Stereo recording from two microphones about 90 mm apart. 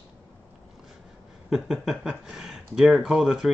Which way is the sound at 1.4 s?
5° right (ahead or behind).